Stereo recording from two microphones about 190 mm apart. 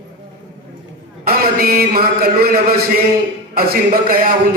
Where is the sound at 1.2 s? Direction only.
50° right (ahead or behind).